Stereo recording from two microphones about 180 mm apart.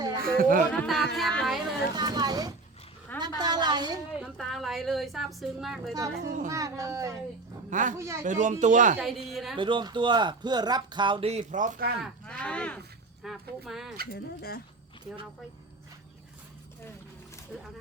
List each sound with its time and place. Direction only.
0.2 s speech: 50° right (ahead or behind)
0.7 s a woman's voice: centre (ahead or behind)
2.0 s a woman's voice: 20° right (ahead or behind)
4.2 s a woman's voice: centre (ahead or behind)
6.2 s speech: 45° right (ahead or behind)
6.5 s speech: 20° right (ahead or behind)
7.7 s speech: 45° right (ahead or behind)
7.9 s speech: 15° right (ahead or behind)
8.2 s speech: 45° right (ahead or behind)
9.0 s a woman's voice: centre (ahead or behind)
9.6 s speech: 25° right (ahead or behind); by 11.9 s 50° right (ahead or behind)
12.2 s a woman's voice: 5° left (ahead or behind)
14.1 s speech: 55° left (ahead or behind)